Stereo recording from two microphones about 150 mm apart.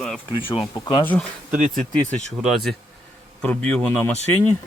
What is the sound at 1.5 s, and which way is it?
Speech, 65° right (ahead or behind).